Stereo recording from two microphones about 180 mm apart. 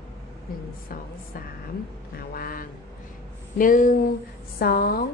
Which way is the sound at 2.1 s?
55° left (ahead or behind).